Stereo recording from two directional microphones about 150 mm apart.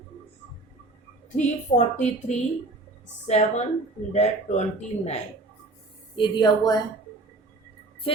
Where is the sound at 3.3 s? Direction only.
50° left (ahead or behind).